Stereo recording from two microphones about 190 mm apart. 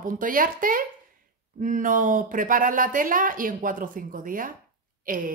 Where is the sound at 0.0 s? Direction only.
45° right (ahead or behind).